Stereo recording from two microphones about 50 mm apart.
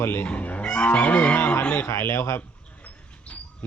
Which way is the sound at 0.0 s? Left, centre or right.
Left.